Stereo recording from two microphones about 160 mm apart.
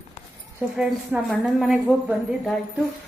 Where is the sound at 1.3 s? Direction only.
Centre (ahead or behind).